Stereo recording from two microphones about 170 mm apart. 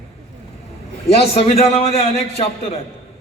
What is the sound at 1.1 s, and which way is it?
A man's voice, 35° left (ahead or behind).